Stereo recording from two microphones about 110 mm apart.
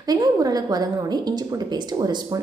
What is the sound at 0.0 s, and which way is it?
A woman's voice, 35° right (ahead or behind).